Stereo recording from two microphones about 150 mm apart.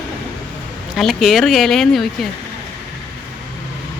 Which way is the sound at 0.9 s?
Centre (ahead or behind).